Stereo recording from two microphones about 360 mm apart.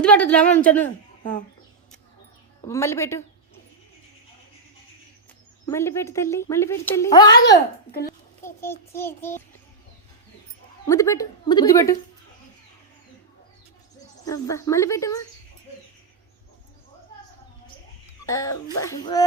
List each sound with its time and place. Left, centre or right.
0.0 s speech: centre
2.6 s a woman's voice: centre
5.6 s a woman's voice: centre
10.8 s a woman's voice: centre
14.3 s a woman's voice: centre
18.3 s a woman's voice: centre